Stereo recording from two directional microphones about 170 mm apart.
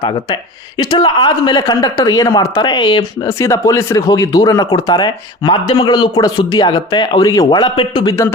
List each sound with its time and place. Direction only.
0.8 s speech: 25° left (ahead or behind)